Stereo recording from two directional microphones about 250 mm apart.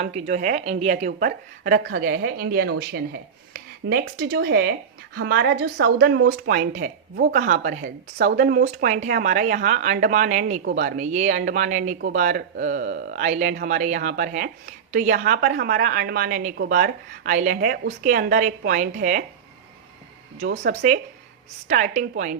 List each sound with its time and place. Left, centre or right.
0.0 s a woman's voice: right
20.4 s a woman's voice: right